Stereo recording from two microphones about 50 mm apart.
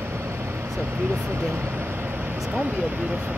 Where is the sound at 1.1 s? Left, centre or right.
Right.